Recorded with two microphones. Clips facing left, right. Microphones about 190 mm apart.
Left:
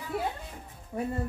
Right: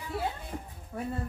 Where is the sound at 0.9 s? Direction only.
15° left (ahead or behind).